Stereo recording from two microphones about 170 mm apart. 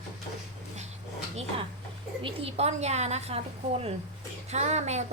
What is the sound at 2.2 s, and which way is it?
A woman's voice, 35° right (ahead or behind).